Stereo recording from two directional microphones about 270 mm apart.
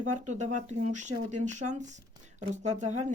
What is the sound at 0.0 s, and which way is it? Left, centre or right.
Speech, right.